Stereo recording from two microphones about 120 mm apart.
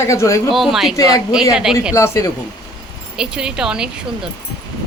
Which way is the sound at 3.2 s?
5° right (ahead or behind).